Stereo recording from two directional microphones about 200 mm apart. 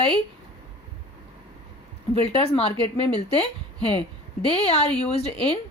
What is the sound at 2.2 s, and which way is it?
Speech, 30° left (ahead or behind).